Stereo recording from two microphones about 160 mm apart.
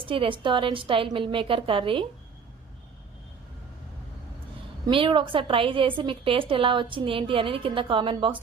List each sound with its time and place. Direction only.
0.0 s a woman's voice: 35° right (ahead or behind)
4.9 s a woman's voice: 30° right (ahead or behind)